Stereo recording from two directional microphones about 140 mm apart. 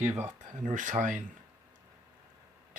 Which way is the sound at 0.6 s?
60° right (ahead or behind).